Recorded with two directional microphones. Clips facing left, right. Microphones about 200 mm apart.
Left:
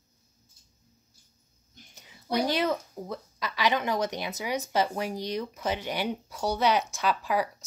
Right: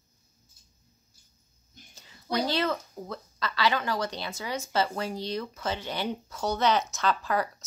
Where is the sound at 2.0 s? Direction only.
15° left (ahead or behind).